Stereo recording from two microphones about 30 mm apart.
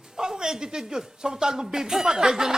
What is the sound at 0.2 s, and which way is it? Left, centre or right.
Speech, right.